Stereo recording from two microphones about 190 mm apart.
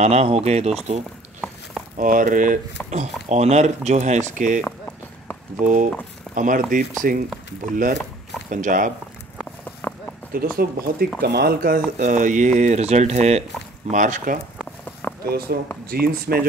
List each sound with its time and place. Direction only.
0.0 s speech: 35° right (ahead or behind)
2.0 s speech: 45° right (ahead or behind)
5.6 s speech: 45° right (ahead or behind)
9.8 s a sound: 10° left (ahead or behind)
10.3 s speech: 50° right (ahead or behind)
12.0 s speech: 45° right (ahead or behind)
15.0 s a sound: 15° left (ahead or behind)
15.5 s speech: 55° right (ahead or behind)